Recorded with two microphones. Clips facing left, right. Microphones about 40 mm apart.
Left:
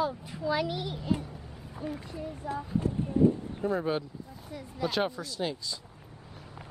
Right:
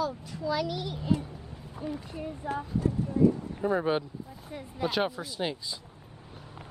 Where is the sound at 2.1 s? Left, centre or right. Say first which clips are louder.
Right 1 dB; right.